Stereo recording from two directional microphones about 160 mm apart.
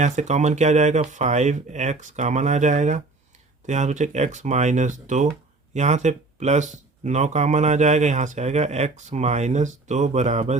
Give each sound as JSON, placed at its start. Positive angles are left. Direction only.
{"t": 0.0, "sound": "speech", "side_deg": -45}